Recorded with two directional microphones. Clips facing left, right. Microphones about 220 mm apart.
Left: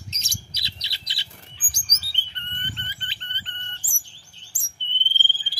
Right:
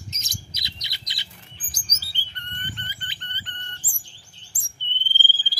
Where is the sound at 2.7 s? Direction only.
25° left (ahead or behind).